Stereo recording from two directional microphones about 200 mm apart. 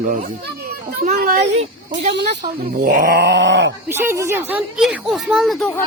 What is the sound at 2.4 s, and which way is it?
Speech, 45° right (ahead or behind).